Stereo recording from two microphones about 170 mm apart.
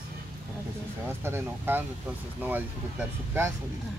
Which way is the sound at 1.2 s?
15° right (ahead or behind).